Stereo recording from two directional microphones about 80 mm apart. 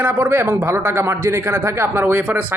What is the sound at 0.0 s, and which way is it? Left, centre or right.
Speech, right.